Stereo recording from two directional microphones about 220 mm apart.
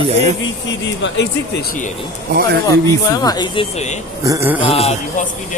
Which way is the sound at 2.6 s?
15° left (ahead or behind).